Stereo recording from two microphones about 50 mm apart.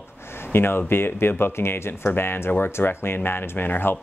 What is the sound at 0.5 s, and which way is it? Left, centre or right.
Speech, left.